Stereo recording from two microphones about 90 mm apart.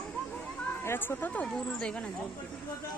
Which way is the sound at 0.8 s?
25° left (ahead or behind).